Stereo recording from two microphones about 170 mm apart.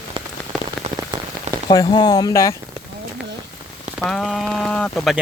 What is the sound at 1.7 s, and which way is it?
Speech, 25° left (ahead or behind).